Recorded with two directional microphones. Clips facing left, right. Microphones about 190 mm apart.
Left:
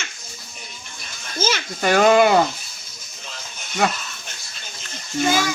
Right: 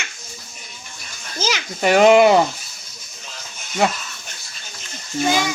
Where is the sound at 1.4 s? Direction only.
15° right (ahead or behind).